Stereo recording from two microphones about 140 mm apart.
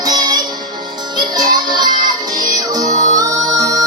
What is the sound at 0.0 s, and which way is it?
Music, 30° right (ahead or behind).